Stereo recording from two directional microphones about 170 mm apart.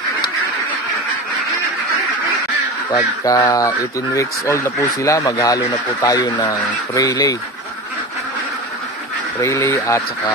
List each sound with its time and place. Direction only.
3.3 s speech: 20° left (ahead or behind)
9.4 s speech: 15° left (ahead or behind)